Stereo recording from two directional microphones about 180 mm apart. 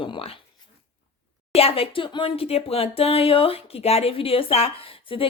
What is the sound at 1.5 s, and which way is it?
Speech, 30° left (ahead or behind).